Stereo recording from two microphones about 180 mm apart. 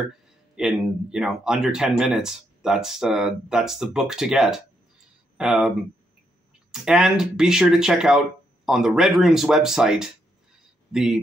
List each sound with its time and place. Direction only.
0.6 s speech: 5° right (ahead or behind)
6.7 s speech: 5° right (ahead or behind)